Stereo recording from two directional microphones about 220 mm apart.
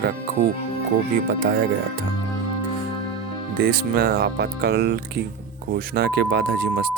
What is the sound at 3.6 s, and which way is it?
Speech, 45° right (ahead or behind).